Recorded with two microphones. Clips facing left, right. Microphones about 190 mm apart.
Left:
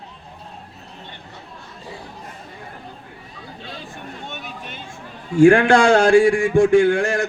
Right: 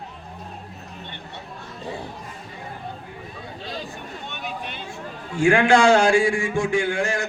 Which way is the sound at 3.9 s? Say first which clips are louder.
Left 2 dB; 45° left (ahead or behind).